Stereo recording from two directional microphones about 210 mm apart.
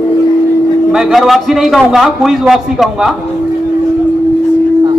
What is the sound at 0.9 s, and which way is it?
Speech, centre (ahead or behind).